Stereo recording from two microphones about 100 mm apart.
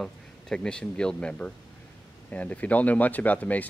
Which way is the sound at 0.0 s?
5° left (ahead or behind).